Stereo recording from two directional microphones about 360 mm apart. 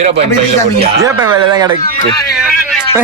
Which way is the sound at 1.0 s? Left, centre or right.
Centre.